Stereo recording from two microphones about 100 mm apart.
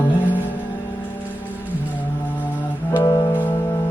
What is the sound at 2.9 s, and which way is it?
Music, 40° left (ahead or behind).